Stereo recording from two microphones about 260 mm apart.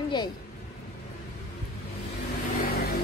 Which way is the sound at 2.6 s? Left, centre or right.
Left.